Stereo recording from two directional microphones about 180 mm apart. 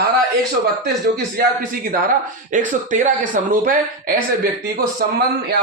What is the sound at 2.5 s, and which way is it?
Speech, 45° right (ahead or behind).